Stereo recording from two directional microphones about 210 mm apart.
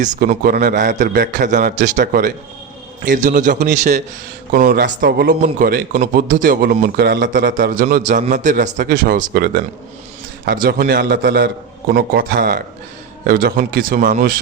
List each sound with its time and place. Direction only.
0.0 s a man's voice: 35° right (ahead or behind)